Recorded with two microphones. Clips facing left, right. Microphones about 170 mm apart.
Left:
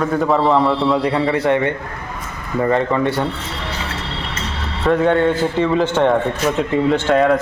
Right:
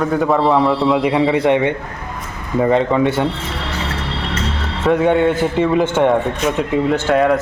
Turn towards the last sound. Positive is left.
turn(degrees=0)  # may be behind; listen again after turning